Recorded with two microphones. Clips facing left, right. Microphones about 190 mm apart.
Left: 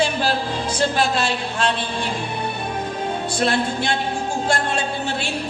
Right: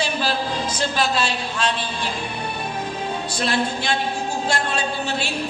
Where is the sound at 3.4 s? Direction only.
50° left (ahead or behind).